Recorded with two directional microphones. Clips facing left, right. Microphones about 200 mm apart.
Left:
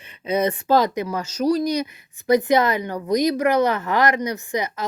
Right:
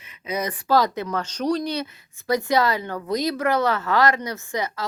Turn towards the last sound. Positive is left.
turn(degrees=20)  # may be behind; listen again after turning